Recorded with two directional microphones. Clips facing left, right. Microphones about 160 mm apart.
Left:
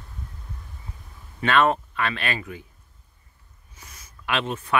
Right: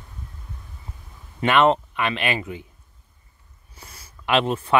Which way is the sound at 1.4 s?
20° right (ahead or behind).